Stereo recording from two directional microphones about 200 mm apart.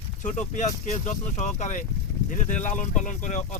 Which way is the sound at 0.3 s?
35° left (ahead or behind).